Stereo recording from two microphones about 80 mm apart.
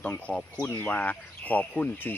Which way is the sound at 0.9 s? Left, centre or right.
Left.